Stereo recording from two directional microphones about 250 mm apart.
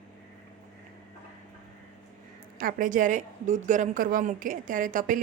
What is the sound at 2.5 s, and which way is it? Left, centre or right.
A woman's voice, right.